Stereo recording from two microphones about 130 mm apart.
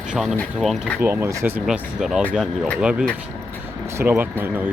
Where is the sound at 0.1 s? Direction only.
5° right (ahead or behind).